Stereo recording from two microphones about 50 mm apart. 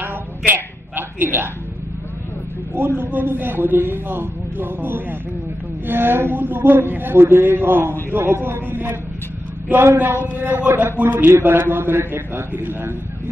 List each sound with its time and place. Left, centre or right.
0.5 s a sound: right
2.7 s a man's voice: right
9.9 s a man's voice: right